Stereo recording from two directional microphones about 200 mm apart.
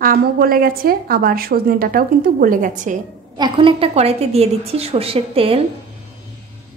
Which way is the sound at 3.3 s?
25° right (ahead or behind).